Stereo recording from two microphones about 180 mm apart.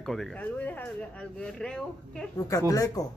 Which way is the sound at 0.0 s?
Centre (ahead or behind).